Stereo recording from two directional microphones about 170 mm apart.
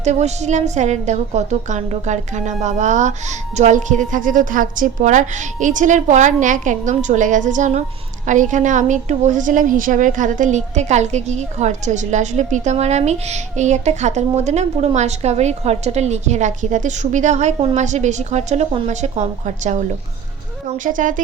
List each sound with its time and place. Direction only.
0.0 s a woman's voice: 40° right (ahead or behind)
20.8 s a woman's voice: 50° right (ahead or behind)